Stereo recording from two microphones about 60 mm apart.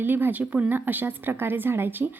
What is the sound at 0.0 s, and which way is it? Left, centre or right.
Speech, right.